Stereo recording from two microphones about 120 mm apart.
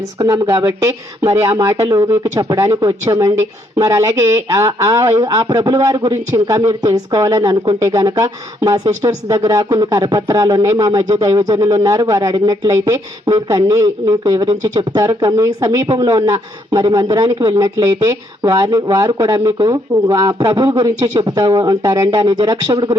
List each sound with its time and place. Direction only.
0.2 s a man's voice: 30° right (ahead or behind)